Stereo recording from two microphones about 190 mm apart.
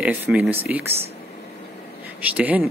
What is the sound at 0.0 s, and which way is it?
Speech, 5° right (ahead or behind).